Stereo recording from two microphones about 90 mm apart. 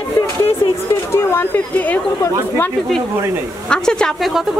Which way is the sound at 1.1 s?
25° left (ahead or behind).